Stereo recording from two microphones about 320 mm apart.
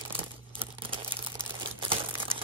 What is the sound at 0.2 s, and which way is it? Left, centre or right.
Crumpling, centre.